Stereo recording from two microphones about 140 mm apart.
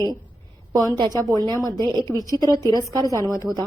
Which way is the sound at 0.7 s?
30° right (ahead or behind).